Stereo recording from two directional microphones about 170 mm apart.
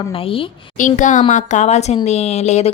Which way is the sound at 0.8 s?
45° left (ahead or behind).